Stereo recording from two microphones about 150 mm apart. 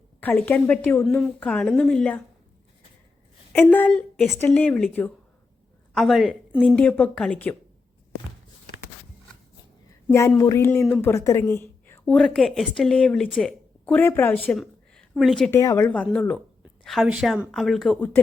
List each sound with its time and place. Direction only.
0.2 s speech: 10° left (ahead or behind)
3.5 s a man's voice: 15° left (ahead or behind)
10.1 s a woman's voice: 15° left (ahead or behind)
12.1 s speech: 5° left (ahead or behind)
14.5 s a sound: 5° left (ahead or behind)
15.4 s speech: 15° left (ahead or behind)
16.8 s a woman's voice: centre (ahead or behind)